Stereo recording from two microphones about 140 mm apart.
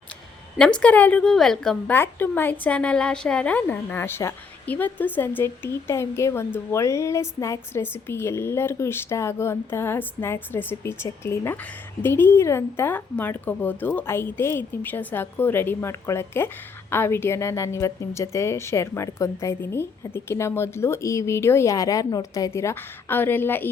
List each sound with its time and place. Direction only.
0.6 s a woman's voice: 5° left (ahead or behind)
2.0 s a woman's voice: 15° left (ahead or behind)